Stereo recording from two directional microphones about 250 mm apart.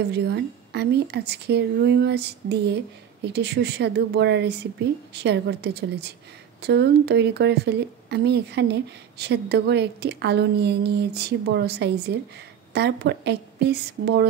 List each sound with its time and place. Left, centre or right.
0.1 s speech: right